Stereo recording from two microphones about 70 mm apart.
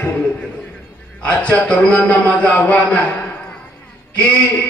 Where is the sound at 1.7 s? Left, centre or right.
Centre.